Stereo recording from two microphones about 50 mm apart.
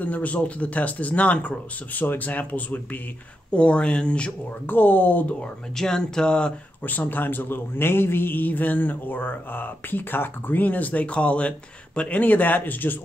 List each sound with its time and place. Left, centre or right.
0.0 s speech: left
3.5 s speech: left
4.6 s speech: left
5.8 s speech: centre
6.8 s speech: left